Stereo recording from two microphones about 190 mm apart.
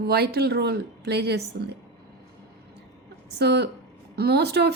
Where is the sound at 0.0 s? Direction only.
55° right (ahead or behind).